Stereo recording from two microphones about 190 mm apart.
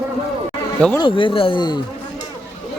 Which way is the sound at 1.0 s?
25° left (ahead or behind).